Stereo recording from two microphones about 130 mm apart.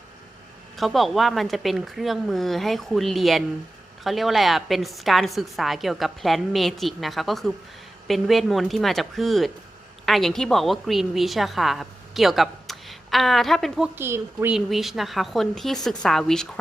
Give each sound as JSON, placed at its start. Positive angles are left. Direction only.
{"t": 0.8, "sound": "a woman's voice", "side_deg": 0}
{"t": 13.9, "sound": "speech", "side_deg": -15}
{"t": 14.5, "sound": "a woman's voice", "side_deg": 0}